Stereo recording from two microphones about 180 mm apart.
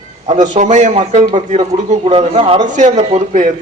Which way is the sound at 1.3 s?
30° right (ahead or behind).